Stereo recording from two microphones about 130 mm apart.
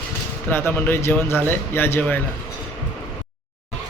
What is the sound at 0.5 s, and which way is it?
Speech, 20° left (ahead or behind).